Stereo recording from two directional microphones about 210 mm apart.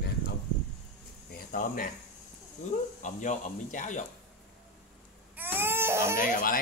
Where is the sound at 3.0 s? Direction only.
35° left (ahead or behind).